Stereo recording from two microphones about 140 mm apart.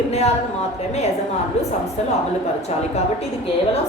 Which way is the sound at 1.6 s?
50° left (ahead or behind).